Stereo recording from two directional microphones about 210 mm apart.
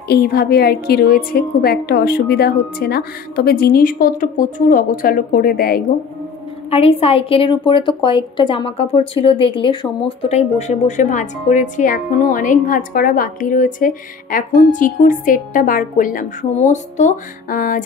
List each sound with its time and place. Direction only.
0.1 s a woman's voice: 45° left (ahead or behind)
6.7 s a woman's voice: 30° left (ahead or behind)